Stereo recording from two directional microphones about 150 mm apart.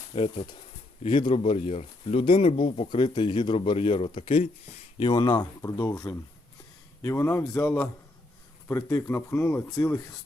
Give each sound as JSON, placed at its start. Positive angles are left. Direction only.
{"t": 0.1, "sound": "speech", "side_deg": 40}
{"t": 4.9, "sound": "speech", "side_deg": 30}